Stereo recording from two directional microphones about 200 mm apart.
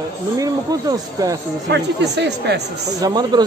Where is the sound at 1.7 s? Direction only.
60° right (ahead or behind).